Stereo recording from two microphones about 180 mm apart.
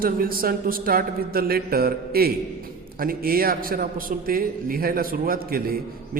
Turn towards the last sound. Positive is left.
turn(degrees=-55)  # may be behind; listen again after turning